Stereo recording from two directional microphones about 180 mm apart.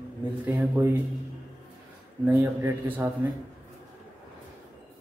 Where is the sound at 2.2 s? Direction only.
10° right (ahead or behind).